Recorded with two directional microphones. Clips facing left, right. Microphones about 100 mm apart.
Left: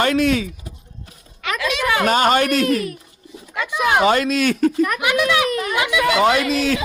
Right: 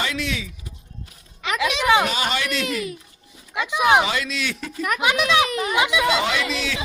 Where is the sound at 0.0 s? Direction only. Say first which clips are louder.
Left 10 dB; 45° left (ahead or behind).